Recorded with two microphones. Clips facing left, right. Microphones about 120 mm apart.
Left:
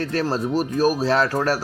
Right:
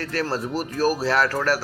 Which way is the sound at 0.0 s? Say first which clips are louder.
Left 3 dB; 25° left (ahead or behind).